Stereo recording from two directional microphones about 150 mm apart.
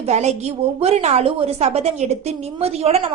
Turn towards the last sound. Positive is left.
turn(degrees=-45)  # may be behind; listen again after turning